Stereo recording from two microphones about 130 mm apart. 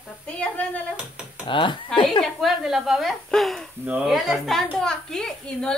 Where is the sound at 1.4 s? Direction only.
40° left (ahead or behind).